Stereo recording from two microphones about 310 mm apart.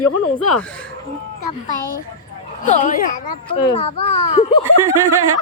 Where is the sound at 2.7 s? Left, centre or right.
Left.